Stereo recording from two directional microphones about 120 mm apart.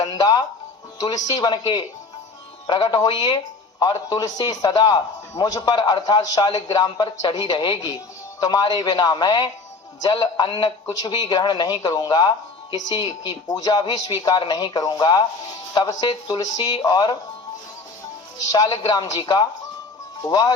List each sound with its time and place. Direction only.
0.0 s music: 35° left (ahead or behind)
0.9 s a man's voice: 30° left (ahead or behind)
18.8 s a man's voice: 35° left (ahead or behind)